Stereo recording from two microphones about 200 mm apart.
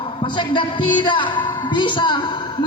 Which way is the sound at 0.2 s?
25° left (ahead or behind).